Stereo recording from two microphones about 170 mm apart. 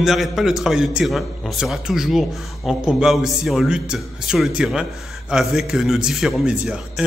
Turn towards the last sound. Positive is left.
turn(degrees=-5)  # may be behind; listen again after turning